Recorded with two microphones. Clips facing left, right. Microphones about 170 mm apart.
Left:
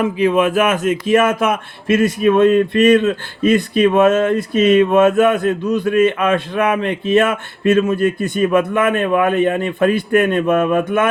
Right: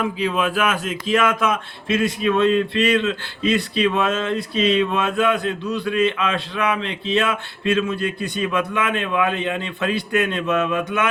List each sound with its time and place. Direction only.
0.2 s speech: 50° left (ahead or behind)